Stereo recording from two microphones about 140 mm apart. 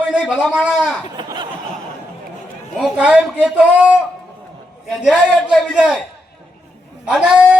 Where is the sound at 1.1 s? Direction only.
35° right (ahead or behind).